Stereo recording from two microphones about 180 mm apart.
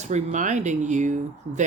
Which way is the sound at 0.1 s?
40° right (ahead or behind).